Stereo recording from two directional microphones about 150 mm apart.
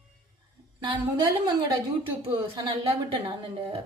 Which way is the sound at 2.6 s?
20° right (ahead or behind).